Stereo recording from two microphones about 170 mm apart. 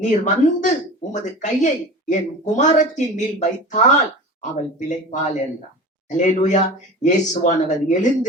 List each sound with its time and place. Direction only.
0.0 s speech: 45° left (ahead or behind)